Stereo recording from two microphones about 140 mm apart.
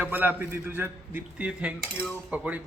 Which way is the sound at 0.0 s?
15° right (ahead or behind).